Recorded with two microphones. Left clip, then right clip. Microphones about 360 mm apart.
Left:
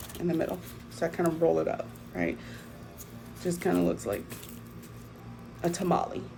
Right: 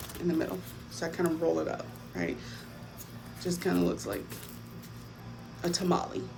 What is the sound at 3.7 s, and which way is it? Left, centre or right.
Speech, centre.